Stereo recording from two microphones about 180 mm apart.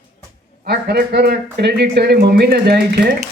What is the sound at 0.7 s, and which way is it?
A man's voice, 65° right (ahead or behind).